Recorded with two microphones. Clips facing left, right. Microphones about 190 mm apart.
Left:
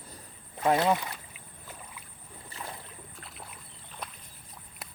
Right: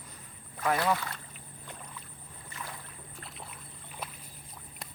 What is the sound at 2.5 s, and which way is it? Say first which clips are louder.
Rowboat: left 2 dB; 30° left (ahead or behind).